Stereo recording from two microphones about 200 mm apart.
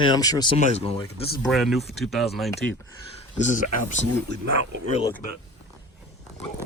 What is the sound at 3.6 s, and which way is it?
Speech, 35° left (ahead or behind).